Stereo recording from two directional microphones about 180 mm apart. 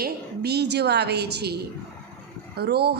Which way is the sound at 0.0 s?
65° right (ahead or behind).